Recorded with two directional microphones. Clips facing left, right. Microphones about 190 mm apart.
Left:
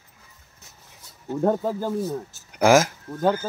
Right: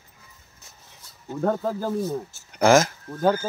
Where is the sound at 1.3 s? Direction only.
15° left (ahead or behind).